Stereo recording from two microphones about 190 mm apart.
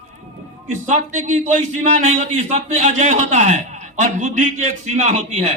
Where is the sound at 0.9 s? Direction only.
40° right (ahead or behind).